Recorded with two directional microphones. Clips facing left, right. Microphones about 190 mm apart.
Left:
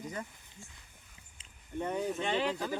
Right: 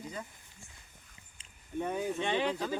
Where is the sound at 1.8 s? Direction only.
10° right (ahead or behind).